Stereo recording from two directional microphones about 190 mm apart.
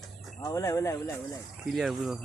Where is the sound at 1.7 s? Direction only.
Centre (ahead or behind).